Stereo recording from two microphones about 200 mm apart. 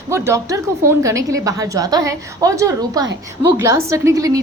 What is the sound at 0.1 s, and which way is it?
A woman's voice, 15° right (ahead or behind).